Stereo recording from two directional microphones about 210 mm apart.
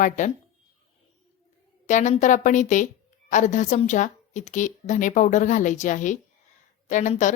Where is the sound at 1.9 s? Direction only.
35° left (ahead or behind).